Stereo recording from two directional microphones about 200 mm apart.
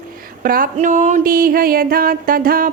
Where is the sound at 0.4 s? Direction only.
45° right (ahead or behind).